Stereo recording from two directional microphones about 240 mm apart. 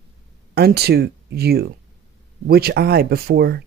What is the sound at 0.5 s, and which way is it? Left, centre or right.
Speech, right.